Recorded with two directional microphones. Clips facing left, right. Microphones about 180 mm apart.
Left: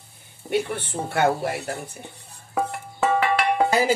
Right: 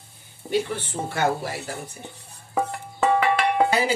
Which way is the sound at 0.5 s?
55° left (ahead or behind).